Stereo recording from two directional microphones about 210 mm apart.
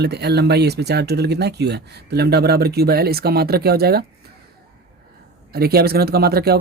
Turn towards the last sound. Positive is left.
turn(degrees=-50)  # may be behind; listen again after turning